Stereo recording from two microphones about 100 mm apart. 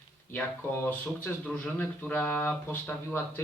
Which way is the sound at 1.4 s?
15° left (ahead or behind).